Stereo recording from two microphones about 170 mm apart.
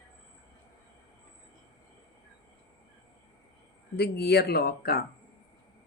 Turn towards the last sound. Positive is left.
turn(degrees=65)  # may be behind; listen again after turning